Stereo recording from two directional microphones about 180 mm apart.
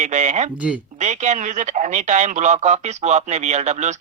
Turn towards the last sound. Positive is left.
turn(degrees=-40)  # may be behind; listen again after turning